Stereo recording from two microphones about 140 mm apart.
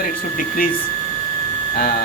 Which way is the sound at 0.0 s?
85° left.